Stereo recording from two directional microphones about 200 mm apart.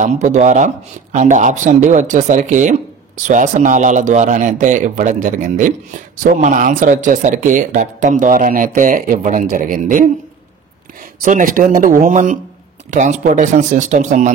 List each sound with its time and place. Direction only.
0.0 s speech: 35° right (ahead or behind)
11.2 s speech: 45° right (ahead or behind)